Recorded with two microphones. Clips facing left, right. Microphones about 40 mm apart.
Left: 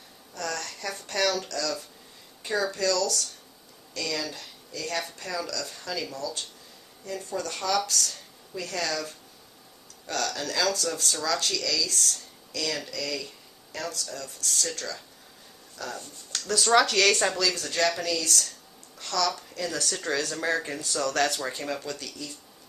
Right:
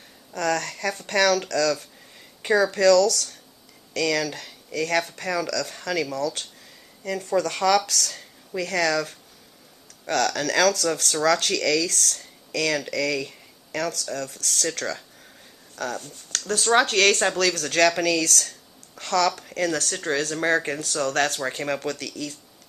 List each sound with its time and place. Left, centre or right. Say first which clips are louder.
0.3 s speech: right 8 dB; right
2.4 s speech: right 8 dB; right
2.7 s speech: right 9 dB; right
3.9 s speech: right 8 dB; right
7.9 s speech: right 2 dB; right
13.7 s speech: right 7 dB; right
14.8 s speech: right 6 dB; right
15.7 s speech: right 6 dB; right
16.8 s speech: right 3 dB; right
17.5 s speech: right 6 dB; right
18.9 s a woman's voice: right 6 dB; right
19.8 s speech: right 3 dB; right
21.5 s speech: right 5 dB; right